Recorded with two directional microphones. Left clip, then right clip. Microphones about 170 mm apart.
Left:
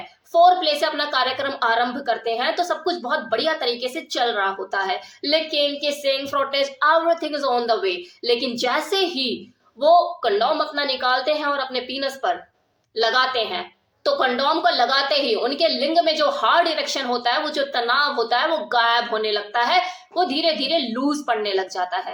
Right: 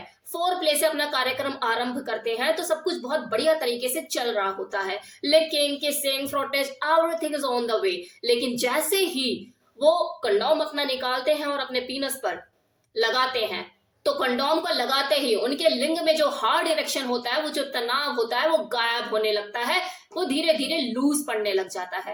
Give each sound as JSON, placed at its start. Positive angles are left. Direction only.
{"t": 0.3, "sound": "a woman's voice", "side_deg": -20}